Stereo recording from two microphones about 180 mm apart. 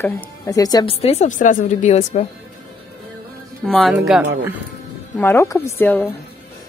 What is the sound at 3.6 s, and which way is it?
Speech, centre (ahead or behind).